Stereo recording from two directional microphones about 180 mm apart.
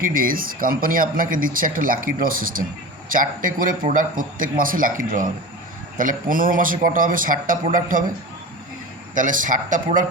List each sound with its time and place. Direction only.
0.0 s speech: 50° right (ahead or behind)
9.1 s speech: 45° right (ahead or behind)